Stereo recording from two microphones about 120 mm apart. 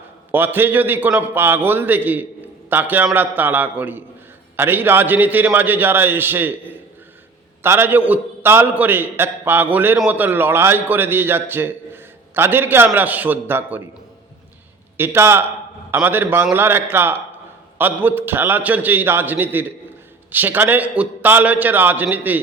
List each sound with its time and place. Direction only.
0.3 s a man's voice: 15° right (ahead or behind)
14.9 s a man's voice: 20° right (ahead or behind)